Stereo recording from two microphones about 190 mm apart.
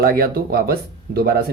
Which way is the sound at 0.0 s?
55° right (ahead or behind).